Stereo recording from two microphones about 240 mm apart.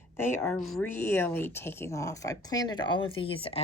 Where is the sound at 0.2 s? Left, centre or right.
Centre.